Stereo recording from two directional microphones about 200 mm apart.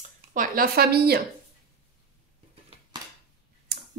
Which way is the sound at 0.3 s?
45° right (ahead or behind).